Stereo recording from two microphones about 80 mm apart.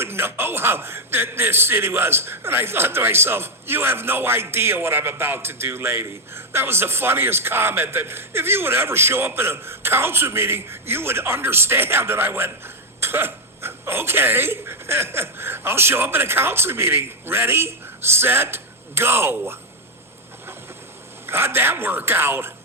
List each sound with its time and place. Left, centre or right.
0.0 s a man's voice: right
21.2 s a man's voice: right